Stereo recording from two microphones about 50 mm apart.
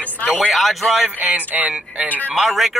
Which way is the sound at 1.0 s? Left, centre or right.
Right.